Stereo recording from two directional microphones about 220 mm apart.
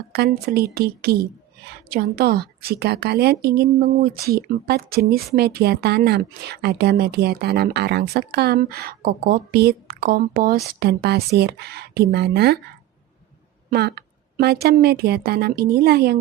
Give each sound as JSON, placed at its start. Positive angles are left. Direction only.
{"t": 0.1, "sound": "a woman's voice", "side_deg": -45}
{"t": 13.7, "sound": "a woman's voice", "side_deg": -45}